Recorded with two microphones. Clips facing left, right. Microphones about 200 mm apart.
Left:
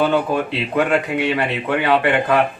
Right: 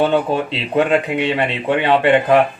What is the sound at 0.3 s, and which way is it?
Speech, 25° right (ahead or behind).